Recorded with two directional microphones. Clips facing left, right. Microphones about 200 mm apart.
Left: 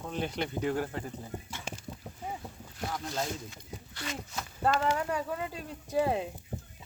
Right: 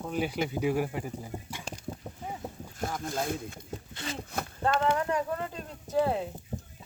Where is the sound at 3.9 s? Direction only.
25° right (ahead or behind).